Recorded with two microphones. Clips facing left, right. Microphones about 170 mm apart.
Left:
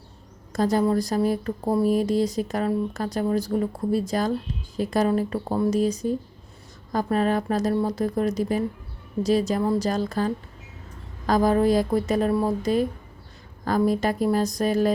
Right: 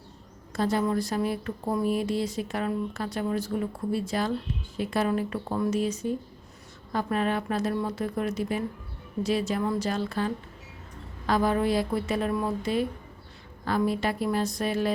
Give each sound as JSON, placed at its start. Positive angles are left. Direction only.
{"t": 0.5, "sound": "speech", "side_deg": 40}